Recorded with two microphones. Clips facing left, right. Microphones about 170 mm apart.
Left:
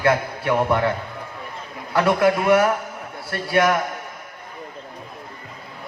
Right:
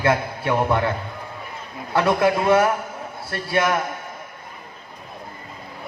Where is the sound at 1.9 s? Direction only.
25° right (ahead or behind).